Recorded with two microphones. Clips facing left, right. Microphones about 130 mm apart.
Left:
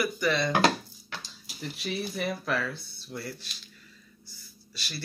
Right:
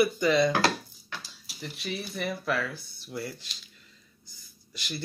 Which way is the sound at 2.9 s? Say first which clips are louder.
Right 2 dB; 15° right (ahead or behind).